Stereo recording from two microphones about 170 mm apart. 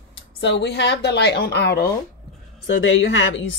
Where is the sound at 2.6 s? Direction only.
90° left.